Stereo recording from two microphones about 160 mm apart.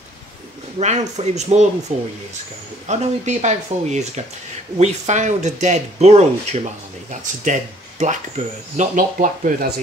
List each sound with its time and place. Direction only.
0.7 s speech: 45° right (ahead or behind)